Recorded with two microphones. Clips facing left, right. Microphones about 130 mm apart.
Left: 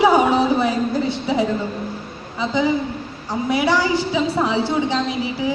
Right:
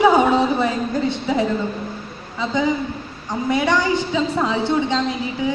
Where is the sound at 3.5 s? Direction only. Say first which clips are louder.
Even; 10° left (ahead or behind).